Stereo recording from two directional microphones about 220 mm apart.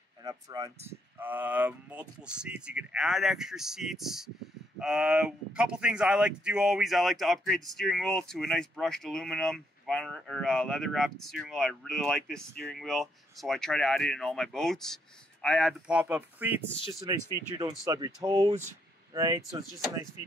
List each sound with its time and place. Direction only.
0.2 s speech: 15° right (ahead or behind)